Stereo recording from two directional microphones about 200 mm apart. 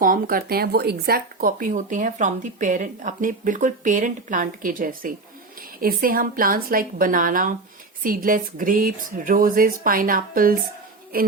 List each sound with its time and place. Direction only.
0.0 s speech: 45° right (ahead or behind)